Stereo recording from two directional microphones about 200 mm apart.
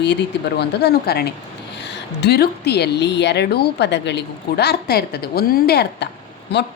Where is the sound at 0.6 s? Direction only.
55° left (ahead or behind).